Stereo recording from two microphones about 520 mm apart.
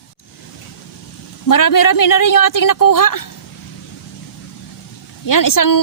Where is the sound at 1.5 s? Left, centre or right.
Left.